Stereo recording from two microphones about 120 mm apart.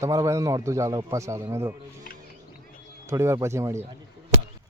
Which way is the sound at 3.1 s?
25° right (ahead or behind).